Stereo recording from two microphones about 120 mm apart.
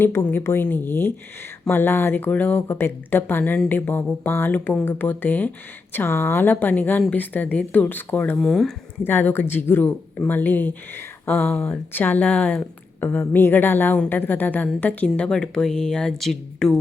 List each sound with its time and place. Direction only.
0.0 s speech: 15° left (ahead or behind)
8.4 s speech: 5° left (ahead or behind)
9.0 s speech: 20° left (ahead or behind)